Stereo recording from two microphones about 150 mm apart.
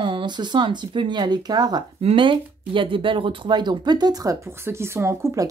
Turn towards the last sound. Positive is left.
turn(degrees=-20)  # may be behind; listen again after turning